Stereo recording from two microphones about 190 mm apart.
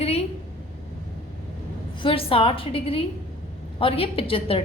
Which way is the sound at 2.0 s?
30° left (ahead or behind).